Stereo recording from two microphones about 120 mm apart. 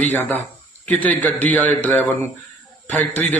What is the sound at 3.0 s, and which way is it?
Speech, 70° right (ahead or behind).